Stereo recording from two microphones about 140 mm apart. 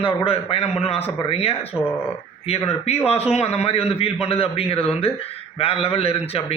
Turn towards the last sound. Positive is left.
turn(degrees=45)  # may be behind; listen again after turning